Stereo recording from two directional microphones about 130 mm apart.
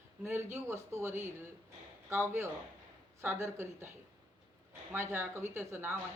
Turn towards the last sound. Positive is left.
turn(degrees=-20)  # may be behind; listen again after turning